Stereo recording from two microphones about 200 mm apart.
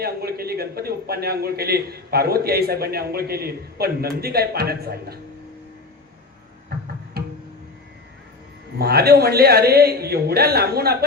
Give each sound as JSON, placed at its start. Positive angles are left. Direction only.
{"t": 0.0, "sound": "a man's voice", "side_deg": -50}
{"t": 6.7, "sound": "music", "side_deg": -50}
{"t": 8.8, "sound": "a man's voice", "side_deg": -50}